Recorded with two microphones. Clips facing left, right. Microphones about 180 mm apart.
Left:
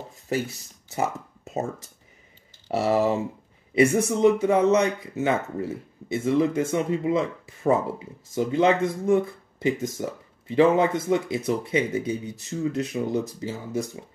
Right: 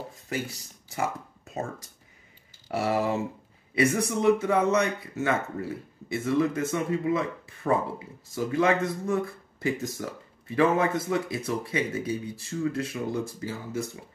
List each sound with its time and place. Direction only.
0.8 s speech: 20° left (ahead or behind)
2.7 s speech: 25° left (ahead or behind)